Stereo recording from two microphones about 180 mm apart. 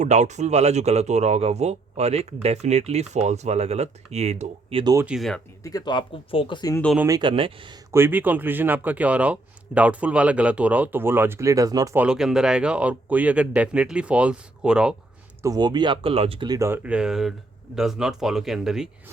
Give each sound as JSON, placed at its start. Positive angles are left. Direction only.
{"t": 0.0, "sound": "speech", "side_deg": -40}
{"t": 4.8, "sound": "speech", "side_deg": -20}
{"t": 5.0, "sound": "speech", "side_deg": 0}
{"t": 5.6, "sound": "speech", "side_deg": 20}
{"t": 7.2, "sound": "speech", "side_deg": -30}
{"t": 7.9, "sound": "a man's voice", "side_deg": -10}
{"t": 11.9, "sound": "a man's voice", "side_deg": -5}
{"t": 15.4, "sound": "speech", "side_deg": -20}